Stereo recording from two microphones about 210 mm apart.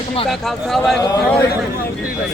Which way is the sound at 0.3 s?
Centre (ahead or behind).